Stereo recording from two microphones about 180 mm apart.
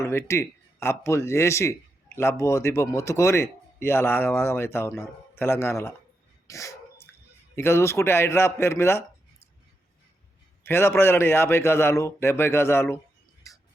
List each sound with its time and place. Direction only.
0.0 s speech: 15° left (ahead or behind)
6.5 s dog: 15° left (ahead or behind)
7.5 s speech: 15° left (ahead or behind)
10.7 s speech: 15° left (ahead or behind)
13.5 s music: 20° left (ahead or behind)